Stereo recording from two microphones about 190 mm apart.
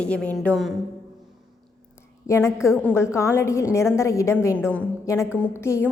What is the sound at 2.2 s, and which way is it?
A woman's voice, 15° left (ahead or behind).